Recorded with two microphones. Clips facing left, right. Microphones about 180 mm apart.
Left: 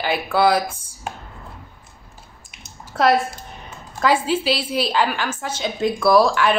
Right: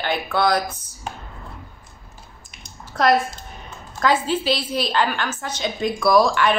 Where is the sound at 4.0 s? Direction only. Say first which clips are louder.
Left 1 dB; 10° left (ahead or behind).